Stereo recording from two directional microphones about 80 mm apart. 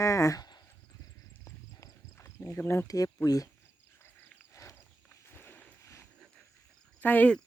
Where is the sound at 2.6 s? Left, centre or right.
Left.